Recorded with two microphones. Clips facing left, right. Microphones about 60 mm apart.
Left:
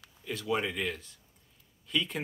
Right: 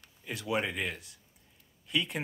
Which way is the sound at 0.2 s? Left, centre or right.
Centre.